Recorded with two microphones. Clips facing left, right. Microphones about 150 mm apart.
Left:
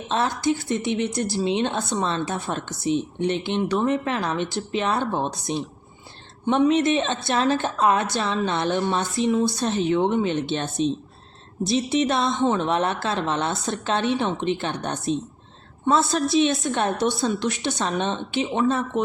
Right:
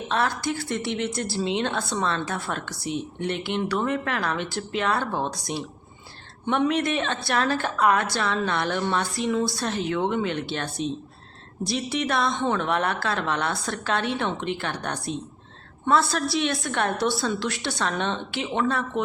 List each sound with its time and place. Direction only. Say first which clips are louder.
0.1 s speech: left 3 dB; 20° left (ahead or behind)